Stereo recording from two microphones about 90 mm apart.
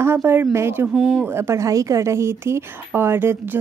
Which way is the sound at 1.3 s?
35° right (ahead or behind).